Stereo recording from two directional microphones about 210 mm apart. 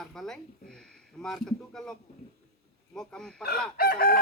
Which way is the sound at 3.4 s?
45° left (ahead or behind).